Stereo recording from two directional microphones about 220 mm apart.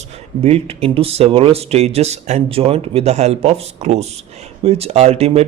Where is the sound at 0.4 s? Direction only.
25° right (ahead or behind).